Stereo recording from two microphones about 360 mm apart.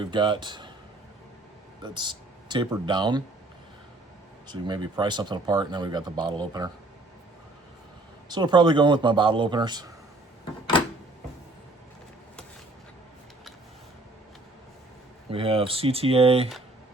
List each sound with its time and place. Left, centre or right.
0.0 s speech: centre
1.8 s speech: centre
4.4 s speech: centre
8.3 s speech: centre
15.3 s speech: centre